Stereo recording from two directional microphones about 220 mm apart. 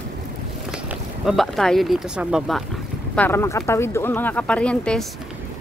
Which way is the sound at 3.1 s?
10° left (ahead or behind).